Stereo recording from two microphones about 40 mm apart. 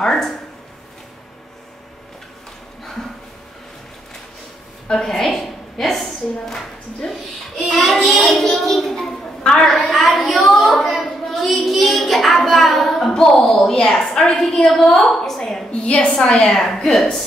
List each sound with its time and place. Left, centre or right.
0.0 s speech: centre
2.8 s a sound: centre
4.8 s a woman's voice: centre
5.3 s a woman's voice: centre
9.4 s a woman's voice: centre
9.8 s a sound: centre
13.1 s a woman's voice: centre
15.7 s a woman's voice: left; by 17.2 s centre